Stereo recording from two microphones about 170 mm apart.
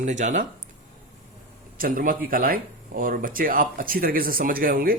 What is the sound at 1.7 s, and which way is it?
A man's voice, 55° right (ahead or behind).